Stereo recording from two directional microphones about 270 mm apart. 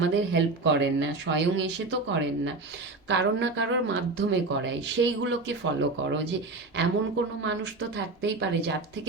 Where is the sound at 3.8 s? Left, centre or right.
Right.